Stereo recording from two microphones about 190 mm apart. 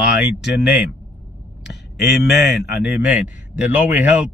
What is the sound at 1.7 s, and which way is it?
Speech, 60° left (ahead or behind).